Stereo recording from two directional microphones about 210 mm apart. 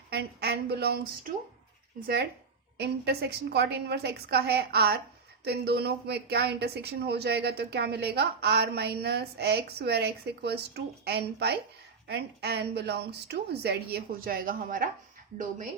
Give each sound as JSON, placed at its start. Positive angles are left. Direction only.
{"t": 0.1, "sound": "speech", "side_deg": -50}
{"t": 2.7, "sound": "speech", "side_deg": -50}